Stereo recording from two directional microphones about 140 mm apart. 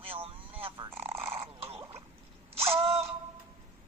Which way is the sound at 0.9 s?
15° right (ahead or behind).